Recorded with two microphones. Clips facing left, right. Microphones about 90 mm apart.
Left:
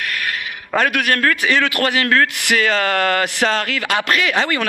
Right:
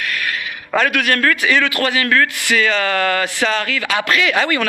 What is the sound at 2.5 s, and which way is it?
Speech, 45° left (ahead or behind).